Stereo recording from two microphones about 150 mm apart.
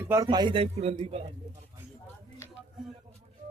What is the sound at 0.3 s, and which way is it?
A man's voice, 30° right (ahead or behind).